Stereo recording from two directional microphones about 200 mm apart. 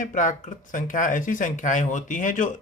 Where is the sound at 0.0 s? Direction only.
40° left (ahead or behind).